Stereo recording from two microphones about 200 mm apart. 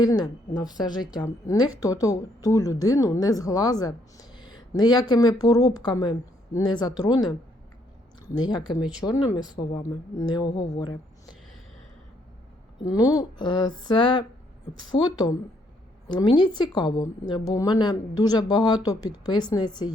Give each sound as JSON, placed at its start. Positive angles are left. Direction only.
{"t": 0.0, "sound": "a woman's voice", "side_deg": 20}
{"t": 12.8, "sound": "a woman's voice", "side_deg": 15}
{"t": 16.0, "sound": "a woman's voice", "side_deg": 20}